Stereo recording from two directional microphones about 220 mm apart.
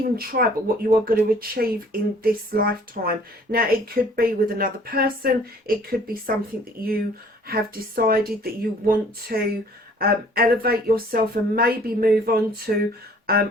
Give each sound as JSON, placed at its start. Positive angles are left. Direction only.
{"t": 0.2, "sound": "speech", "side_deg": -45}